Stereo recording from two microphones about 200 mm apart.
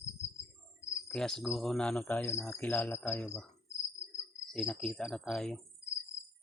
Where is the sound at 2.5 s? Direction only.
10° left (ahead or behind).